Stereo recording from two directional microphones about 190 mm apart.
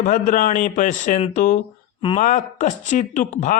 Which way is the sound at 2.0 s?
30° left (ahead or behind).